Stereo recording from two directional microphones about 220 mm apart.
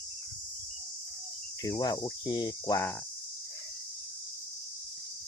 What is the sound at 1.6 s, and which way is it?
Speech, 15° left (ahead or behind).